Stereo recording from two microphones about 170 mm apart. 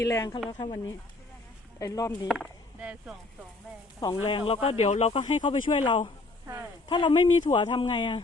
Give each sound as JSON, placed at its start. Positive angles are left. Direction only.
{"t": 0.0, "sound": "a woman's voice", "side_deg": 20}
{"t": 2.2, "sound": "speech", "side_deg": 0}
{"t": 4.0, "sound": "speech", "side_deg": 25}
{"t": 5.5, "sound": "speech", "side_deg": 30}